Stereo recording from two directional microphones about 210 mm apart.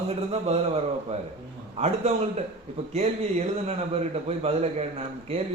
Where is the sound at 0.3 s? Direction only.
30° right (ahead or behind).